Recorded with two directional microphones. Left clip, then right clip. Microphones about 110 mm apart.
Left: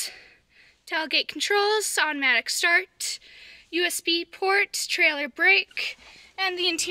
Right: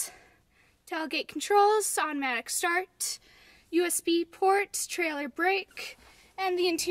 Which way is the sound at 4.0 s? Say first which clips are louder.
Left 1 dB; 45° right (ahead or behind).